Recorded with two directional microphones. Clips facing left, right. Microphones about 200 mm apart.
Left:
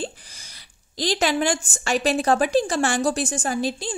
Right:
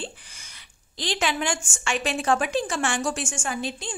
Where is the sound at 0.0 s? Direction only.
40° left (ahead or behind).